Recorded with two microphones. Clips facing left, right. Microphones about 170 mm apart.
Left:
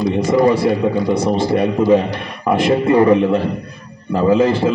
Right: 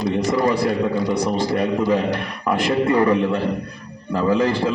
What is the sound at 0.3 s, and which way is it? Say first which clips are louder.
A man's voice: left 7 dB; 25° left (ahead or behind).